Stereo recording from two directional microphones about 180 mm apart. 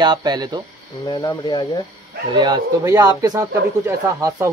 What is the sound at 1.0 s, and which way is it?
Speech, 25° left (ahead or behind).